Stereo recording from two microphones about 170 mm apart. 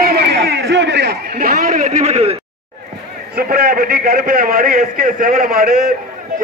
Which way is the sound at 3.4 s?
60° right (ahead or behind).